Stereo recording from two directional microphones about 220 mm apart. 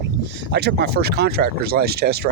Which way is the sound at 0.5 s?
50° right (ahead or behind).